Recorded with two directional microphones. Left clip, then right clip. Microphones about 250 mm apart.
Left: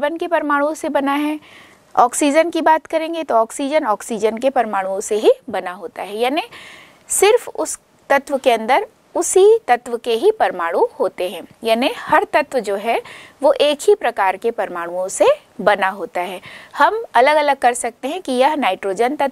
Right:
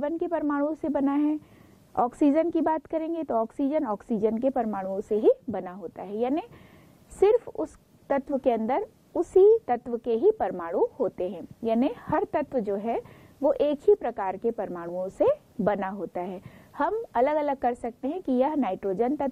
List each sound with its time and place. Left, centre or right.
0.0 s speech: centre
10.8 s a woman's voice: left
11.1 s speech: centre